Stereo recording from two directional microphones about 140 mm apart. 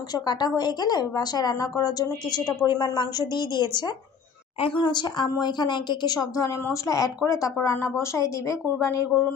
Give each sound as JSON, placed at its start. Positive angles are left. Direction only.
{"t": 0.1, "sound": "a woman's voice", "side_deg": 30}